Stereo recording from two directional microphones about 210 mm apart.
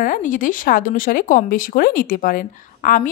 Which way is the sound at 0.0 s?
40° left (ahead or behind).